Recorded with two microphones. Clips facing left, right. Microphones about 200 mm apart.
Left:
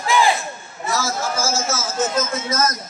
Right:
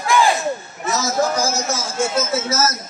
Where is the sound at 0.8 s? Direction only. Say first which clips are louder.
Right 3 dB; 20° right (ahead or behind).